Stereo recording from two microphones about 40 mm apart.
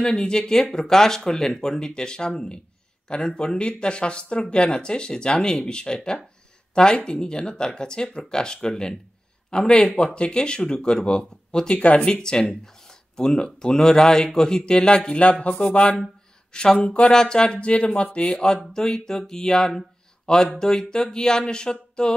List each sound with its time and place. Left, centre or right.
0.1 s speech: centre
17.1 s speech: centre
18.3 s speech: centre